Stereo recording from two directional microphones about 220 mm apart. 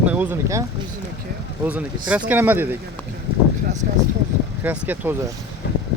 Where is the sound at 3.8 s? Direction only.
40° right (ahead or behind).